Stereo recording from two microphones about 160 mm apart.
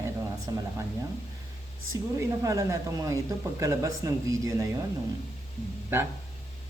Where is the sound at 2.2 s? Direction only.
20° right (ahead or behind).